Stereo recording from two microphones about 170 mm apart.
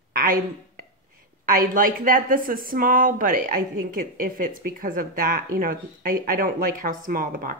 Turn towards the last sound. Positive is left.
turn(degrees=-55)  # may be behind; listen again after turning